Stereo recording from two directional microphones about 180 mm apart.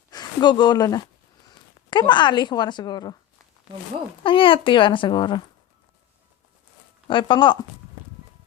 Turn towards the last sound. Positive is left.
turn(degrees=25)  # may be behind; listen again after turning